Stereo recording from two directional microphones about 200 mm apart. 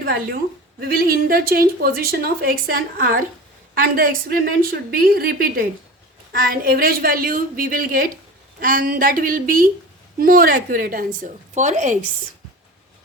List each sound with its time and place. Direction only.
0.0 s a woman's voice: 50° right (ahead or behind)